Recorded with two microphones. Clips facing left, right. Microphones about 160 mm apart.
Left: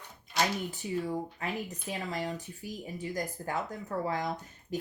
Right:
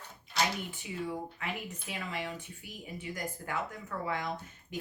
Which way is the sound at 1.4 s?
40° left (ahead or behind).